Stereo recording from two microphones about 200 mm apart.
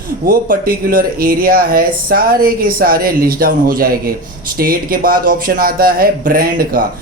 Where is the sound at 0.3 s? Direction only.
45° right (ahead or behind).